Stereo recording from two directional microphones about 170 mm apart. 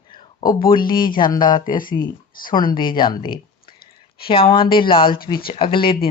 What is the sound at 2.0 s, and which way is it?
Speech, 55° left (ahead or behind).